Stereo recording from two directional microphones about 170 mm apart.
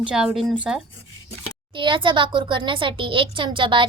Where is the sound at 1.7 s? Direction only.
30° right (ahead or behind).